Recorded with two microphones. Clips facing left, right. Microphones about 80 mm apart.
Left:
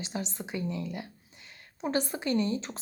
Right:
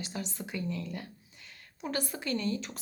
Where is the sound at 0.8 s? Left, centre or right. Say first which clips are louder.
Left 3 dB; centre.